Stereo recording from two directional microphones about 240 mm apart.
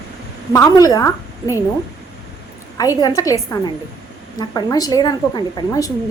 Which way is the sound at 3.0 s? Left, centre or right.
Centre.